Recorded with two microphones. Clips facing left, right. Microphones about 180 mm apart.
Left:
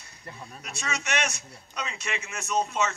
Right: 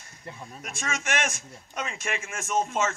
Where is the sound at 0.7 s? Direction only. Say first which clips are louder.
Right 1 dB; 50° right (ahead or behind).